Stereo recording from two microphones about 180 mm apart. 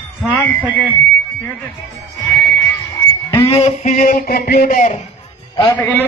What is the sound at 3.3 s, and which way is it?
A man's voice, 30° left (ahead or behind).